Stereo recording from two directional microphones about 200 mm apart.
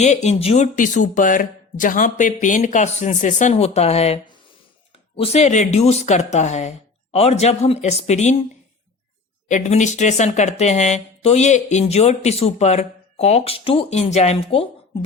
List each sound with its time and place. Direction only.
0.0 s speech: 35° left (ahead or behind)
9.5 s speech: 35° left (ahead or behind)